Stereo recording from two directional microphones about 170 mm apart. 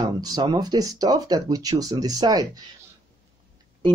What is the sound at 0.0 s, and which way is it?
Speech, 25° right (ahead or behind).